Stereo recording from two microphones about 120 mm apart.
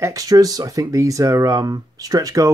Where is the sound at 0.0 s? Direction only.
30° right (ahead or behind).